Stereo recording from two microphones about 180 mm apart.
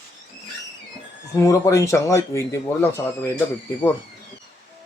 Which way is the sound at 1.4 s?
15° left (ahead or behind).